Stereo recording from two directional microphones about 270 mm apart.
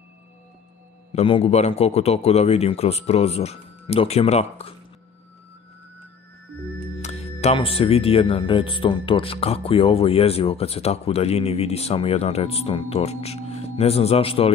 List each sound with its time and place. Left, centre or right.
1.1 s speech: left
7.0 s speech: left